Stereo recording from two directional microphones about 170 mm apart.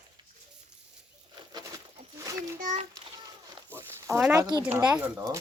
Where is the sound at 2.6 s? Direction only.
50° right (ahead or behind).